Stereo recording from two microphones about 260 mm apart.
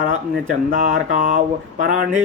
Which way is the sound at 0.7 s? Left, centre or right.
Right.